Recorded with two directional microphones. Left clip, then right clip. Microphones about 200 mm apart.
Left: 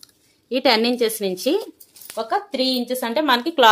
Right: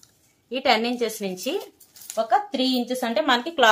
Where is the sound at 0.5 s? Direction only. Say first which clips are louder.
Left 4 dB; 50° left (ahead or behind).